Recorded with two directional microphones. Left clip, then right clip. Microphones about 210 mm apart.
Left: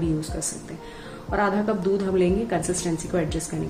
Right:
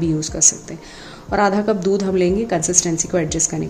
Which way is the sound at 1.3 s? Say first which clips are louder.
Right 6 dB; 30° right (ahead or behind).